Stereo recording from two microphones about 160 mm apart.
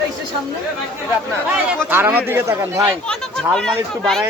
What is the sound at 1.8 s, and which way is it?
A man's voice, 10° right (ahead or behind).